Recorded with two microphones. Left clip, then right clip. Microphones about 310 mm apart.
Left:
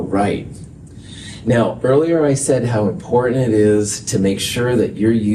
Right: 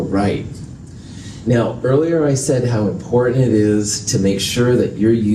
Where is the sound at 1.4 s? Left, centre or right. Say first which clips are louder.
Left 2 dB; left.